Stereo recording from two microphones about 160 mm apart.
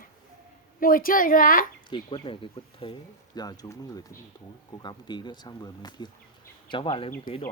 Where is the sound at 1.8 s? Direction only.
30° left (ahead or behind).